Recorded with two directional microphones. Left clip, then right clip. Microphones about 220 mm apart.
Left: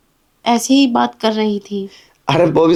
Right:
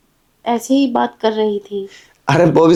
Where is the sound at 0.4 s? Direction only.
25° left (ahead or behind).